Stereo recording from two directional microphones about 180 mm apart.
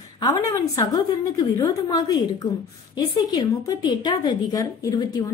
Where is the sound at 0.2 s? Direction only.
20° left (ahead or behind).